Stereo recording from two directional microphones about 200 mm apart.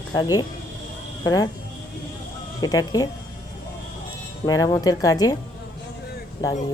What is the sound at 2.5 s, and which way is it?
Speech, 20° left (ahead or behind).